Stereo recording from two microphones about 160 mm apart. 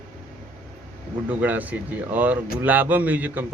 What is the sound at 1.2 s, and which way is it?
A man's voice, 10° right (ahead or behind).